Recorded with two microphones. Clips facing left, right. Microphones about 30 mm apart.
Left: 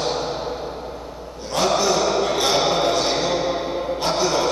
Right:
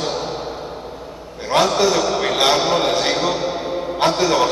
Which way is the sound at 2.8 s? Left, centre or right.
Right.